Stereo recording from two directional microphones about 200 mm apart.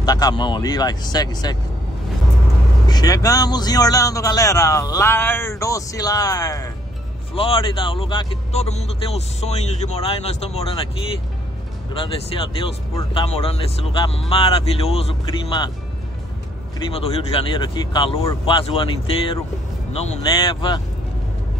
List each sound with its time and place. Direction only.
0.0 s speech: 20° left (ahead or behind)
2.9 s a man's voice: 20° left (ahead or behind)
16.9 s speech: 30° left (ahead or behind)